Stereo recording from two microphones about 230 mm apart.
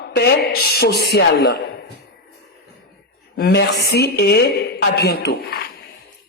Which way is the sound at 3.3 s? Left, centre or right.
Left.